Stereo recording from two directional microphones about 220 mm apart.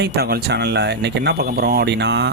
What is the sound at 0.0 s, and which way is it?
Speech, 45° right (ahead or behind).